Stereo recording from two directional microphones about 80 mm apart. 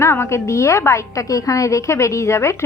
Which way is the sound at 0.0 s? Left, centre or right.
Left.